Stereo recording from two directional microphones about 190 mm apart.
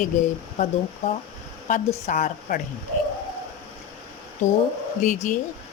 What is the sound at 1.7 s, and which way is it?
Speech, 40° left (ahead or behind).